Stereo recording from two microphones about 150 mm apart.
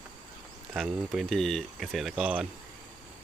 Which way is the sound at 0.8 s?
Centre (ahead or behind).